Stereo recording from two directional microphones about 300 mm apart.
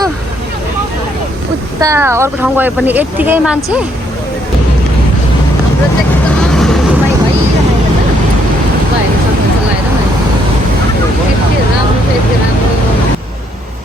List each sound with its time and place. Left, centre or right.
1.8 s speech: centre